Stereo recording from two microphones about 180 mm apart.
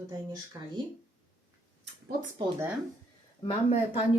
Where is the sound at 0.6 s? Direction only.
20° right (ahead or behind).